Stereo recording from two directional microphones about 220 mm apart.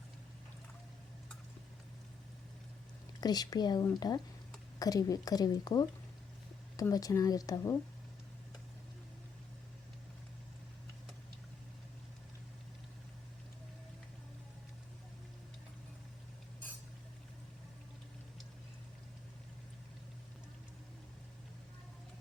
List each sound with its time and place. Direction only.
3.2 s speech: 20° left (ahead or behind)